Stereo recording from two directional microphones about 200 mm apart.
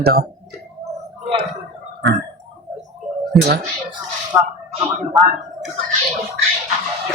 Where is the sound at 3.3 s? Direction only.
Centre (ahead or behind).